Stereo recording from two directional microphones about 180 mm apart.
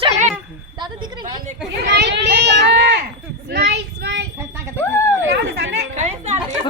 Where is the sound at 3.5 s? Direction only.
70° right (ahead or behind).